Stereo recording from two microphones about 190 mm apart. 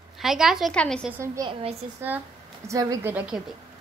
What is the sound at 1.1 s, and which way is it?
Speech, 15° right (ahead or behind).